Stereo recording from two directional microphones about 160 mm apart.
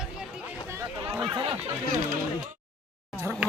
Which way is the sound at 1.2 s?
30° right (ahead or behind).